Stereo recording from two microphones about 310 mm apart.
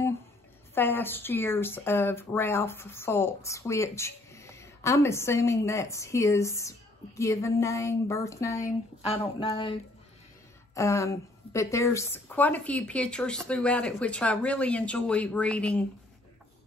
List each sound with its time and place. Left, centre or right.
0.7 s speech: centre